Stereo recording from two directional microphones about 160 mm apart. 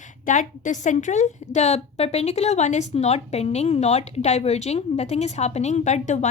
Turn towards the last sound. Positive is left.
turn(degrees=45)  # may be behind; listen again after turning